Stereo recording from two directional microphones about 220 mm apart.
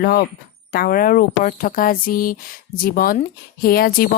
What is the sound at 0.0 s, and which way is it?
A woman's voice, 45° left (ahead or behind).